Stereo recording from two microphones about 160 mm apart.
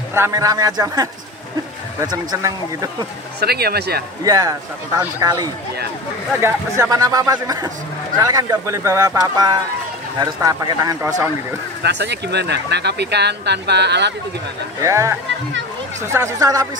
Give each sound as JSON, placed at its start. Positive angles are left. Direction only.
{"t": 0.1, "sound": "speech", "side_deg": -20}
{"t": 3.3, "sound": "speech", "side_deg": -80}
{"t": 4.2, "sound": "speech", "side_deg": -25}
{"t": 11.8, "sound": "speech", "side_deg": -90}
{"t": 14.8, "sound": "speech", "side_deg": -20}